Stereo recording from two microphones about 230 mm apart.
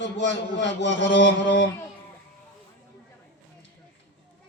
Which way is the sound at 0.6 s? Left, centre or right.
Left.